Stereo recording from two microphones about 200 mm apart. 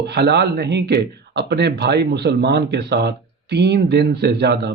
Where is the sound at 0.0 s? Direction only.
55° right (ahead or behind).